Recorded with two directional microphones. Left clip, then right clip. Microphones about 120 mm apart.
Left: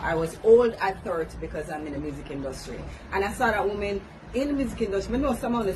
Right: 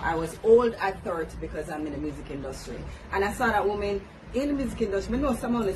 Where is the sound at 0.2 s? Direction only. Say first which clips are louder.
Left 2 dB; 15° right (ahead or behind).